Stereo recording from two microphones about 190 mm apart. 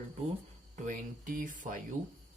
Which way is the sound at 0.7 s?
45° right (ahead or behind).